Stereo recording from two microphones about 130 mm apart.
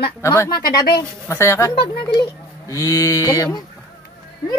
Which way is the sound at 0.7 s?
35° left (ahead or behind).